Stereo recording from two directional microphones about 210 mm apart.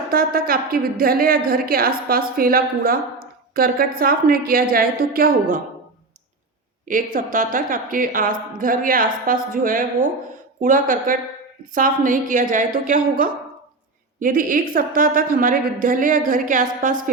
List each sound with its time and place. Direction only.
0.1 s a woman's voice: 45° right (ahead or behind)
6.8 s speech: 40° right (ahead or behind)